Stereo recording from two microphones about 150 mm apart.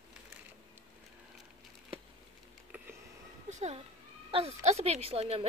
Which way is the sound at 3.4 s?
50° right (ahead or behind).